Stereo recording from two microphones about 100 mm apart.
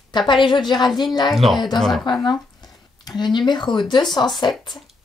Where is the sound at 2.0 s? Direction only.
50° left (ahead or behind).